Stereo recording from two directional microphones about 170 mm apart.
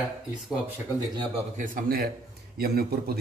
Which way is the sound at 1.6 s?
55° right (ahead or behind).